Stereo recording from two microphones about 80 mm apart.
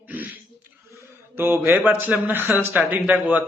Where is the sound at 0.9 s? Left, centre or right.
Right.